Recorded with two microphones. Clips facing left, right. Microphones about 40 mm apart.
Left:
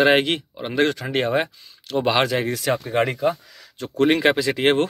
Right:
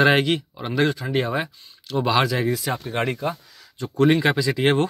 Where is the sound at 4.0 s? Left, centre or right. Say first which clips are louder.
Left 1 dB; left.